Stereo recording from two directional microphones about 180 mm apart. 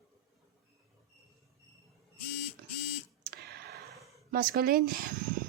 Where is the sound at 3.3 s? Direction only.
60° right (ahead or behind).